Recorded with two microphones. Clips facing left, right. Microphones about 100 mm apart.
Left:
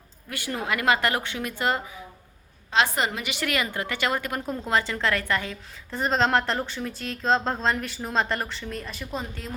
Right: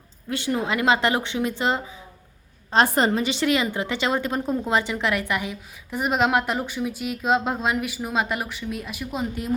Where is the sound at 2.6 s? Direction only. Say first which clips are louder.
Right 4 dB; 40° right (ahead or behind).